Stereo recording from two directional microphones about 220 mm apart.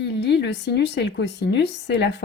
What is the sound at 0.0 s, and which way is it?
Speech, 50° left (ahead or behind).